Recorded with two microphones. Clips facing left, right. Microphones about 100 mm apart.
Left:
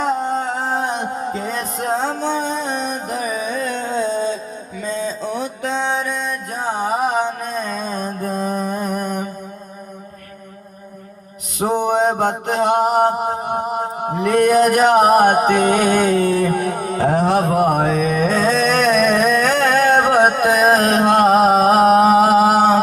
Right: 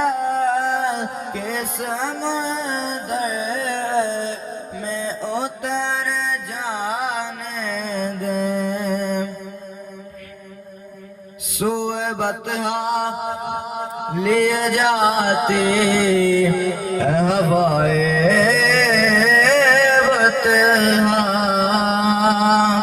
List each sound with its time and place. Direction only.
0.0 s music: 30° left (ahead or behind)
6.2 s music: 40° left (ahead or behind)
11.6 s mantra: 40° left (ahead or behind)